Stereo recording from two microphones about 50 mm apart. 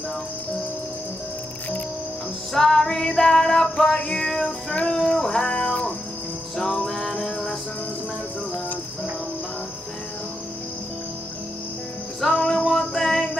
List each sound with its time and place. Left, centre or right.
2.5 s female singing: centre
4.9 s music: centre
7.1 s music: centre
12.3 s music: centre
12.7 s music: centre